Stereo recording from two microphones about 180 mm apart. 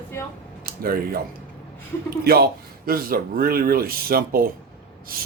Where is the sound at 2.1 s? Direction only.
60° right (ahead or behind).